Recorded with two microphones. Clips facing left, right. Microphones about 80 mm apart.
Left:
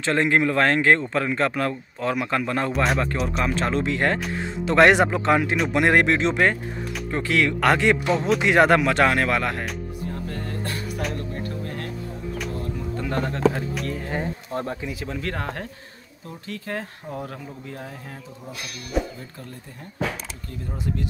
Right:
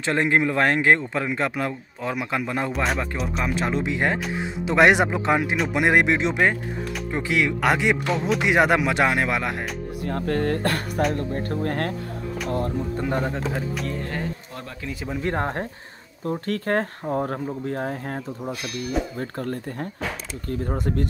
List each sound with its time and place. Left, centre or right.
0.0 s speech: right
2.7 s speech: centre
3.4 s speech: centre
8.0 s speech: centre
8.4 s speech: centre
10.0 s speech: right
11.0 s speech: right
11.6 s speech: right
12.9 s speech: centre
13.5 s speech: centre
14.5 s speech: left
15.2 s speech: right
16.3 s speech: right